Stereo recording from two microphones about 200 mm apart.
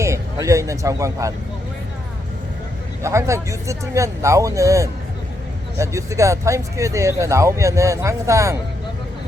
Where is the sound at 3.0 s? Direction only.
15° right (ahead or behind).